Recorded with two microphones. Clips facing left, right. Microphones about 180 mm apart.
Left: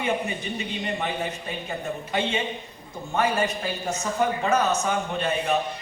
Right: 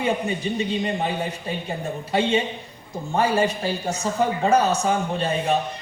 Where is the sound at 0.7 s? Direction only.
30° right (ahead or behind).